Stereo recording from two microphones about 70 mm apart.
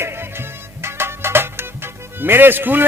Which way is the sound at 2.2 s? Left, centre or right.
Right.